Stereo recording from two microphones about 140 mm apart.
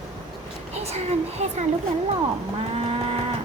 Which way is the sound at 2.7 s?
45° right (ahead or behind).